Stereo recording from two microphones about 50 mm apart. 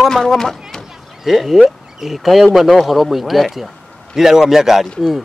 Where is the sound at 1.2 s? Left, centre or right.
Centre.